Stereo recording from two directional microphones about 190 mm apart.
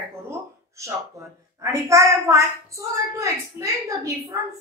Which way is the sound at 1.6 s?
15° right (ahead or behind).